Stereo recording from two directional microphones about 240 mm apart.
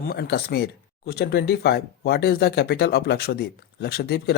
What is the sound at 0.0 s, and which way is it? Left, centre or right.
Speech, left.